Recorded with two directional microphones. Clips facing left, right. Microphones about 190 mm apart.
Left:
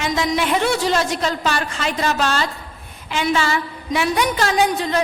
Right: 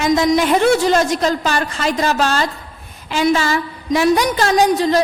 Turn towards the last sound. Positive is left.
turn(degrees=-35)  # may be behind; listen again after turning